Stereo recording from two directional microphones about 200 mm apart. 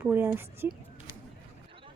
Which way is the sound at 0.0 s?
10° right (ahead or behind).